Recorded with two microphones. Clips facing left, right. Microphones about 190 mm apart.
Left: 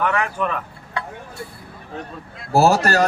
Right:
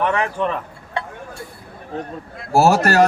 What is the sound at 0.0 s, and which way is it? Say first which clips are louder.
Speech: right 2 dB; 25° right (ahead or behind).